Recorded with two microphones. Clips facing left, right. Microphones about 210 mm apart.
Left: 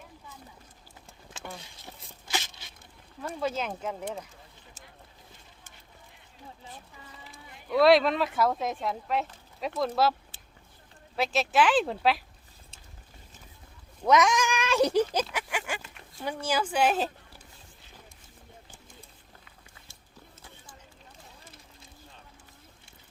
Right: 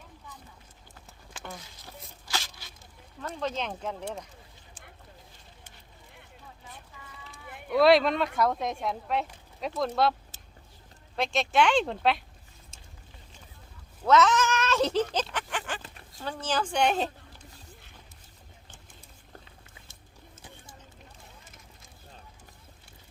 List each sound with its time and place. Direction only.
1.5 s a sound: 25° left (ahead or behind)
3.2 s speech: 10° left (ahead or behind)
7.7 s speech: centre (ahead or behind)
11.2 s speech: 5° left (ahead or behind)
12.7 s boat: 45° right (ahead or behind)
14.0 s cat: 15° left (ahead or behind)
16.2 s speech: 10° left (ahead or behind)